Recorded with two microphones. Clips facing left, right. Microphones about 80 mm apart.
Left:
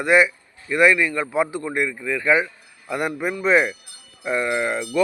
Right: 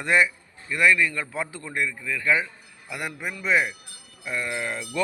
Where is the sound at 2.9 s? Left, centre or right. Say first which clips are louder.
Left 8 dB; left.